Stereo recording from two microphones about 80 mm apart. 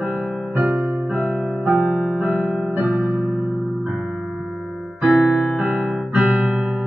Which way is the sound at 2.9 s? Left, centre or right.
Centre.